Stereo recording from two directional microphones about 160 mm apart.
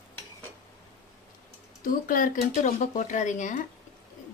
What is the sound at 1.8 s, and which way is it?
Speech, 55° left (ahead or behind).